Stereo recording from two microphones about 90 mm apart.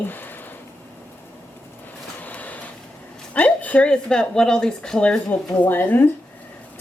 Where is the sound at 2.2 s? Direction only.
20° left (ahead or behind).